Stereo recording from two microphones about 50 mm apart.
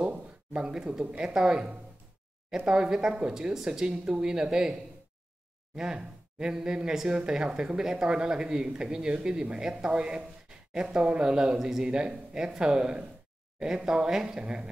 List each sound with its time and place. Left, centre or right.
0.0 s speech: right
5.8 s speech: centre